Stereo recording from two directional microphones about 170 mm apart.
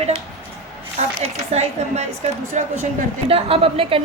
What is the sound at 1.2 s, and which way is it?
Speech, 40° right (ahead or behind).